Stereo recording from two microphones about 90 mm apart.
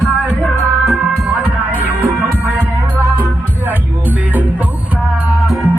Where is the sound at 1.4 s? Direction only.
20° right (ahead or behind).